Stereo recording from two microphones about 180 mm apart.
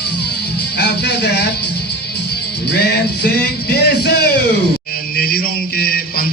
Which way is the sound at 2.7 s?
60° left (ahead or behind).